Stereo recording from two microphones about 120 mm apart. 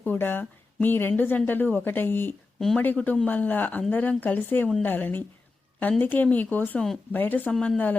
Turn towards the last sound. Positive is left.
turn(degrees=0)  # may be behind; listen again after turning